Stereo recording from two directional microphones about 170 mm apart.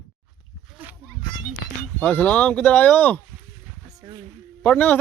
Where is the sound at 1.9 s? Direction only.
10° left (ahead or behind).